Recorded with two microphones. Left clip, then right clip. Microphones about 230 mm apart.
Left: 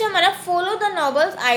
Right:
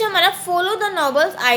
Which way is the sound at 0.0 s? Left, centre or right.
Centre.